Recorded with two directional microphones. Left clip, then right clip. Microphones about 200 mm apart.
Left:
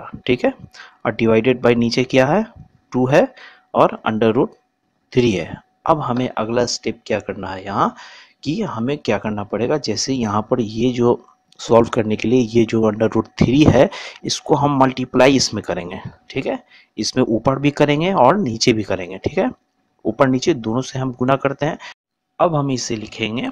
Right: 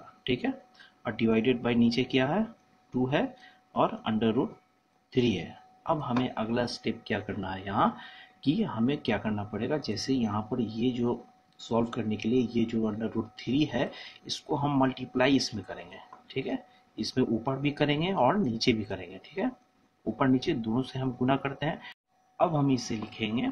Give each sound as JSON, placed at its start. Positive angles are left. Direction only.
{"t": 0.2, "sound": "speech", "side_deg": 50}